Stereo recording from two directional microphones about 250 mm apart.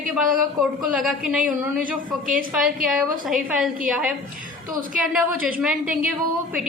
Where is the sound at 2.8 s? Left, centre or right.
Centre.